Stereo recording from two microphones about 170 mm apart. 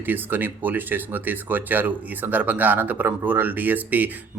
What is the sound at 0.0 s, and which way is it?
Speech, 10° right (ahead or behind).